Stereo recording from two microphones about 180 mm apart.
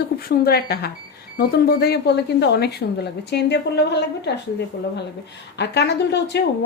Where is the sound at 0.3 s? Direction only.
60° left (ahead or behind).